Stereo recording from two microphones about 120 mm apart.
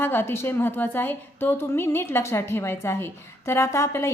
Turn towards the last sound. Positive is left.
turn(degrees=25)  # may be behind; listen again after turning